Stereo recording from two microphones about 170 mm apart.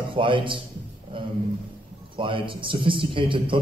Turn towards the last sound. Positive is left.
turn(degrees=-30)  # may be behind; listen again after turning